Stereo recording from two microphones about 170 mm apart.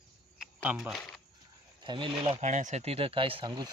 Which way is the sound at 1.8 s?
30° right (ahead or behind).